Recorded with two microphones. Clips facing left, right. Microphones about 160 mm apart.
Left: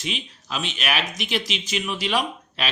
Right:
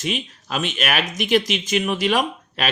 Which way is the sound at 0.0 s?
50° right (ahead or behind).